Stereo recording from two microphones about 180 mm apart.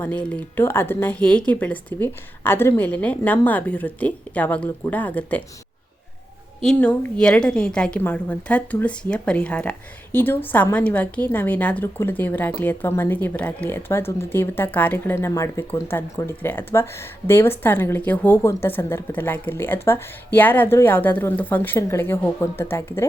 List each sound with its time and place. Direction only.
0.0 s a woman's voice: 10° left (ahead or behind)
6.6 s a woman's voice: 5° left (ahead or behind)